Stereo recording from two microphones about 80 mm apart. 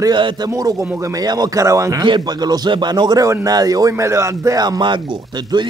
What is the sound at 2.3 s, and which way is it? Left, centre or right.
Speech, right.